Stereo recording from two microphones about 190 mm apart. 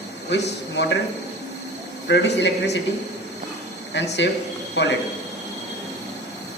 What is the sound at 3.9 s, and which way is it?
A man's voice, 65° left (ahead or behind).